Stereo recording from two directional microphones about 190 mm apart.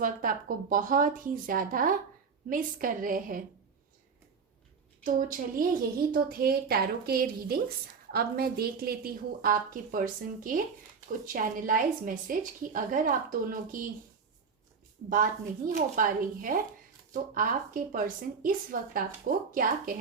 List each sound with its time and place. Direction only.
0.0 s a woman's voice: 45° right (ahead or behind)
5.0 s a woman's voice: 45° right (ahead or behind)
15.1 s a woman's voice: 45° right (ahead or behind)
17.9 s a woman's voice: 45° right (ahead or behind)